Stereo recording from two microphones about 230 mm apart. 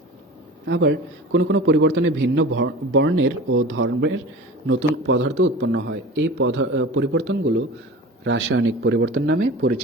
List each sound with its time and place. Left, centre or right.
0.6 s a man's voice: right